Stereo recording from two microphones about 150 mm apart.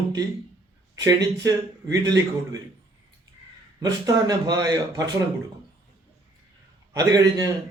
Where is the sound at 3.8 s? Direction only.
25° right (ahead or behind).